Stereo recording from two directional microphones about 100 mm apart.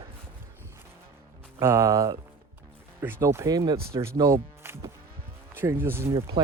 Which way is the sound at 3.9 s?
25° right (ahead or behind).